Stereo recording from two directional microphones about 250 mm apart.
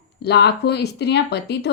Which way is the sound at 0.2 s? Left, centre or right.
Left.